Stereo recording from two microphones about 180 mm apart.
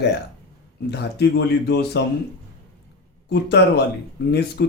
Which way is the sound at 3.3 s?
70° left (ahead or behind).